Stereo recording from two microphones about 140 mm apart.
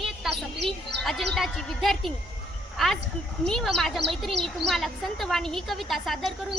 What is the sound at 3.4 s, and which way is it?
Speech, 5° left (ahead or behind).